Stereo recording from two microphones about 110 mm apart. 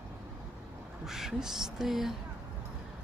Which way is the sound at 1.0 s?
5° right (ahead or behind).